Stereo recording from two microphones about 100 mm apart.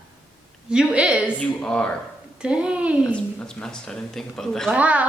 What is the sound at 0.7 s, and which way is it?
Speech, 10° right (ahead or behind).